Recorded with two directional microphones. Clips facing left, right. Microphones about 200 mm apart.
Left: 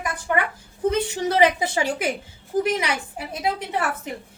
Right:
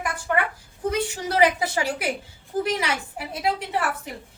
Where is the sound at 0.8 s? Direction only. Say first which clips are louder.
Left 4 dB; 20° left (ahead or behind).